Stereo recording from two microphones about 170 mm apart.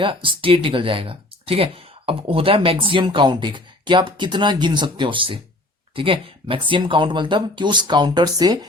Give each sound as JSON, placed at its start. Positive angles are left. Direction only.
{"t": 0.0, "sound": "speech", "side_deg": -30}